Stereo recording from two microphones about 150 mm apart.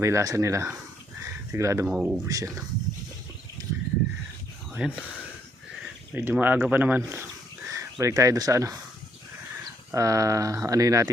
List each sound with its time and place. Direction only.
0.0 s speech: 20° right (ahead or behind)
1.9 s speech: 5° right (ahead or behind)
2.2 s speech: 20° right (ahead or behind)
4.7 s speech: 10° right (ahead or behind)
6.1 s speech: 15° right (ahead or behind)
9.9 s speech: 20° right (ahead or behind)